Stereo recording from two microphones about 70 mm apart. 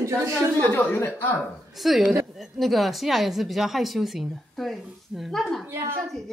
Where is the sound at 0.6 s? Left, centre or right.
Left.